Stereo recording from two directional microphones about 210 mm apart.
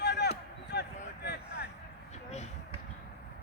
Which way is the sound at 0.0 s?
50° left (ahead or behind).